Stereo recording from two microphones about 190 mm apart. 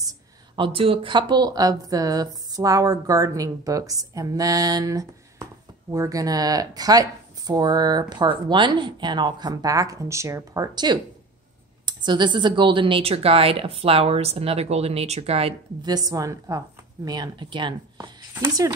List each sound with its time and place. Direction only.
0.6 s speech: 30° right (ahead or behind)